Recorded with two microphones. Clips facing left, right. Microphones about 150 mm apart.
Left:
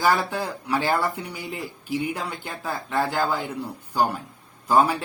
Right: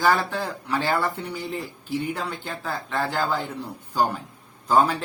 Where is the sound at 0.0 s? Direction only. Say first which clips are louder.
Even; 10° left (ahead or behind).